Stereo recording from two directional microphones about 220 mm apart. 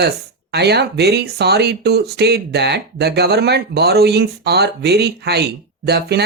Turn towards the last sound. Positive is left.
turn(degrees=-50)  # may be behind; listen again after turning